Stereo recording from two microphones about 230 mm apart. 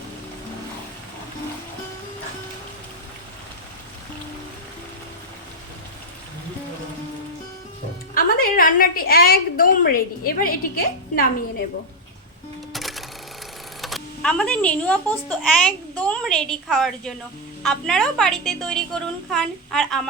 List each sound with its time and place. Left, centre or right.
8.1 s a woman's voice: left
12.7 s cash register: centre
13.8 s speech: centre